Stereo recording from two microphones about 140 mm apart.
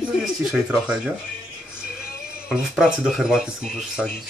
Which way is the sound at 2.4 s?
5° right (ahead or behind).